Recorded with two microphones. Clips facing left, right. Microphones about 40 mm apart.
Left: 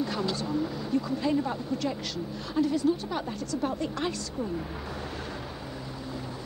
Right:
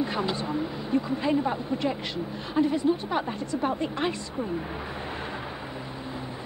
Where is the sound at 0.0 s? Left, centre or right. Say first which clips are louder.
Right 2 dB; right.